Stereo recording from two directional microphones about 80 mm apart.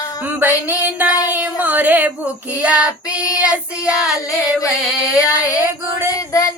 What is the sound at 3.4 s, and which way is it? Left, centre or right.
Female singing, centre.